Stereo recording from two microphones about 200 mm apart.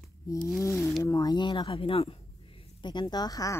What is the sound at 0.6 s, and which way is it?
Speech, 15° left (ahead or behind).